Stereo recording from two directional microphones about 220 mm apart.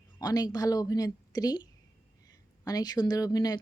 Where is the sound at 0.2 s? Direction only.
15° left (ahead or behind).